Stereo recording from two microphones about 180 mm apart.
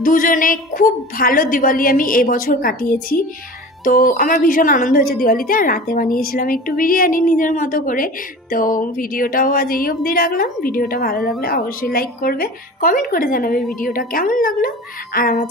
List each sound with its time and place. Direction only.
0.0 s a woman's voice: 50° left (ahead or behind)